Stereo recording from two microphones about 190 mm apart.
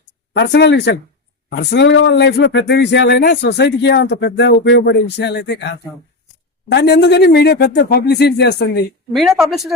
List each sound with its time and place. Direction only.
0.3 s speech: 65° left (ahead or behind)
6.7 s speech: 60° left (ahead or behind)
9.1 s speech: centre (ahead or behind)